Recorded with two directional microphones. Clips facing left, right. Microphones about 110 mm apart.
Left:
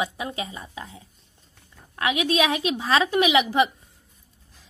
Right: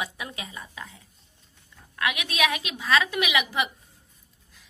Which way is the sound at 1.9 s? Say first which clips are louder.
Left 5 dB; 30° left (ahead or behind).